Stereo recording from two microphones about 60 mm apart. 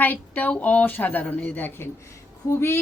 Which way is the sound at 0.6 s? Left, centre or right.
Left.